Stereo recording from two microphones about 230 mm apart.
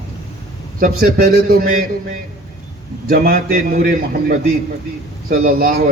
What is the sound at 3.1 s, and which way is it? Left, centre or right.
A man's voice, right.